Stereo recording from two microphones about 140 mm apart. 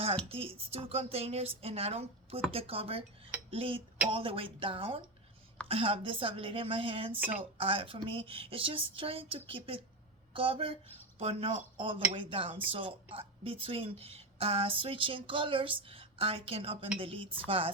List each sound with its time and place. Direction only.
0.3 s speech: 45° right (ahead or behind)
7.1 s speech: 15° right (ahead or behind)
7.6 s speech: 40° right (ahead or behind)